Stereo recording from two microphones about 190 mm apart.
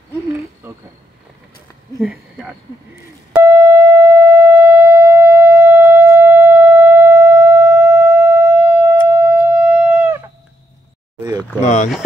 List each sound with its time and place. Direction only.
0.6 s speech: 10° right (ahead or behind)
2.0 s speech: centre (ahead or behind)
3.3 s busy signal: 10° right (ahead or behind)
9.1 s a sound: 10° right (ahead or behind)
11.1 s a sound: 20° right (ahead or behind)
11.6 s rowboat: 40° left (ahead or behind)